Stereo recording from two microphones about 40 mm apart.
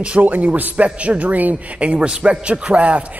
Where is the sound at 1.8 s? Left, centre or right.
Right.